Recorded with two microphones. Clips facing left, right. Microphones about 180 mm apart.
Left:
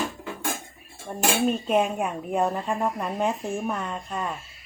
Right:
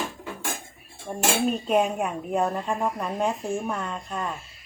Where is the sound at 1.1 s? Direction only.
5° right (ahead or behind).